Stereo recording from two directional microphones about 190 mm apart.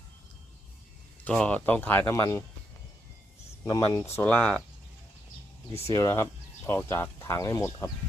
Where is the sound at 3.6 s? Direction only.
20° left (ahead or behind).